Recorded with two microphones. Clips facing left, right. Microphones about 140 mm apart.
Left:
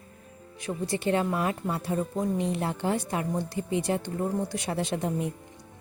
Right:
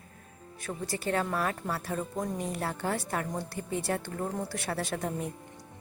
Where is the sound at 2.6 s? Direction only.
20° left (ahead or behind).